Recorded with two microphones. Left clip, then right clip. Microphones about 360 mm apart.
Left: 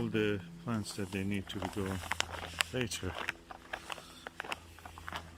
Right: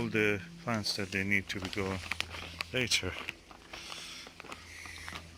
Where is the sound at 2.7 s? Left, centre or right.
Centre.